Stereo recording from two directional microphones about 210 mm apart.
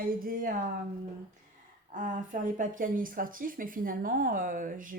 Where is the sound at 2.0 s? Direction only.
40° right (ahead or behind).